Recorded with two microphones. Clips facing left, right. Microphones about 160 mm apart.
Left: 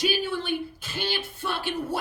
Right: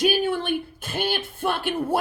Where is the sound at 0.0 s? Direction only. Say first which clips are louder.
Right 5 dB; 55° right (ahead or behind).